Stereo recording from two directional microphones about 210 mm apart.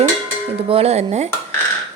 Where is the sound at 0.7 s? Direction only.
30° right (ahead or behind).